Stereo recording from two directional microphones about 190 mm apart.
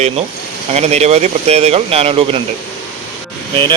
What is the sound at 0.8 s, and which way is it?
Speech, 35° right (ahead or behind).